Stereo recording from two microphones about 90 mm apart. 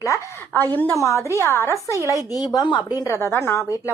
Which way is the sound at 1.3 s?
25° left (ahead or behind).